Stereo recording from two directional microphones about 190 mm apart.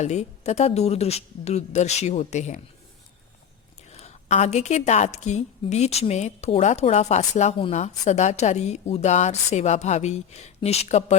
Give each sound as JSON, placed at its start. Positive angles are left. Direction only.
{"t": 0.0, "sound": "a woman's voice", "side_deg": 35}
{"t": 3.8, "sound": "a woman's voice", "side_deg": 35}